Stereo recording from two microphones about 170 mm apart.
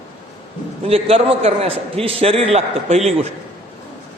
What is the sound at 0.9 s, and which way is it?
A man's voice, 35° right (ahead or behind).